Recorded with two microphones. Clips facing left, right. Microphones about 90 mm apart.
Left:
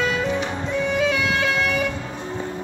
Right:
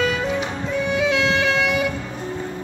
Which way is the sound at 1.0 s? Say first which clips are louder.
Right 2 dB; 20° right (ahead or behind).